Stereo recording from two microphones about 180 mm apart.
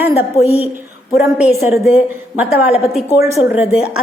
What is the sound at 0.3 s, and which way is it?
Speech, 35° left (ahead or behind).